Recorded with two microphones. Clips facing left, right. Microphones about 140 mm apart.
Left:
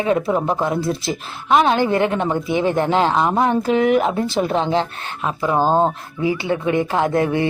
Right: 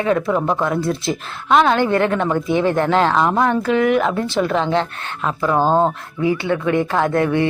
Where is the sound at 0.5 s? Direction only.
30° left (ahead or behind).